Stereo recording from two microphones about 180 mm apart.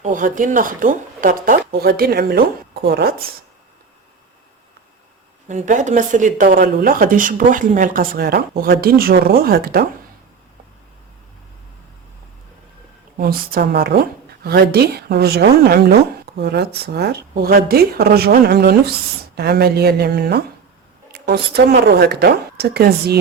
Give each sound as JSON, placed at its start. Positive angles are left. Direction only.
{"t": 0.0, "sound": "speech", "side_deg": -45}
{"t": 5.5, "sound": "speech", "side_deg": -45}
{"t": 13.1, "sound": "speech", "side_deg": -55}